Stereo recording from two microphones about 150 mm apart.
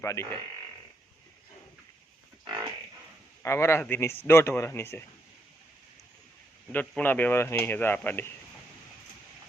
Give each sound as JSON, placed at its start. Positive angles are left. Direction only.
{"t": 0.0, "sound": "speech", "side_deg": 20}
{"t": 2.4, "sound": "livestock", "side_deg": -30}
{"t": 3.4, "sound": "speech", "side_deg": 20}
{"t": 6.7, "sound": "speech", "side_deg": 10}